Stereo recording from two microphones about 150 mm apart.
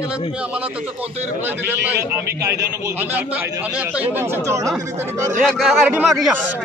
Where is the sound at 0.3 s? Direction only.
10° right (ahead or behind).